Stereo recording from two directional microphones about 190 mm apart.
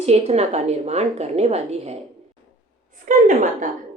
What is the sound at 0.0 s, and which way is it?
A woman's voice, 35° right (ahead or behind).